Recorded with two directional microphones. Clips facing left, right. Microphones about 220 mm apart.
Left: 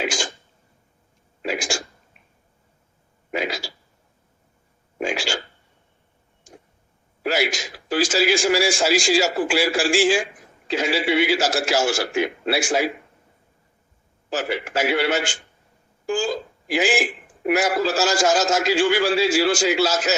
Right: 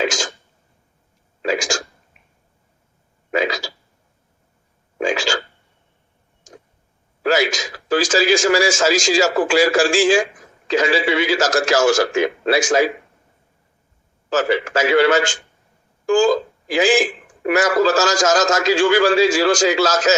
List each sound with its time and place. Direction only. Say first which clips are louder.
0.0 s speech: right 4 dB; 90° right
1.4 s speech: right 5 dB; 90° right
3.3 s a sound: right 6 dB; 90° right
5.0 s a sound: right 5 dB; 90° right
7.2 s a man's voice: right 5 dB; 90° right
14.3 s a man's voice: right 7 dB; 90° right